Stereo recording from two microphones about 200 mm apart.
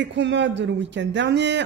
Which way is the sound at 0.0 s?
60° right (ahead or behind).